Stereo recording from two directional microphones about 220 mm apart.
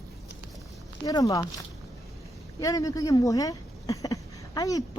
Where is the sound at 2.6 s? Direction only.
15° left (ahead or behind).